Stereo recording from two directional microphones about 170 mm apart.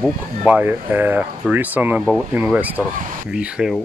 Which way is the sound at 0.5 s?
10° right (ahead or behind).